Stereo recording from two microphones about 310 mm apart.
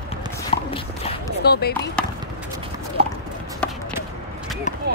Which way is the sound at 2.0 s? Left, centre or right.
Centre.